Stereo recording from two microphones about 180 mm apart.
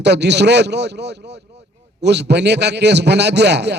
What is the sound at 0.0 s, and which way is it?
A man's voice, 70° right (ahead or behind).